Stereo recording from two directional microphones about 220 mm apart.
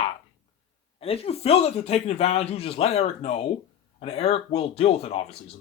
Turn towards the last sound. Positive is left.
turn(degrees=25)  # may be behind; listen again after turning